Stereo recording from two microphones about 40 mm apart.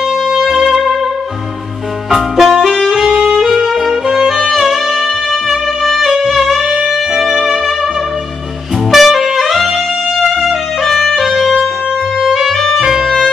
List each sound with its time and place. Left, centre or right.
0.3 s music: centre
2.0 s music: centre
3.1 s saxophone: centre
3.3 s music: centre
4.1 s saxophone: centre
4.6 s music: centre
8.9 s music: centre
13.0 s music: centre